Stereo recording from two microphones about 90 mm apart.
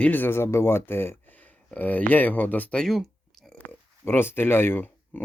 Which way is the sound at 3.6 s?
20° left (ahead or behind).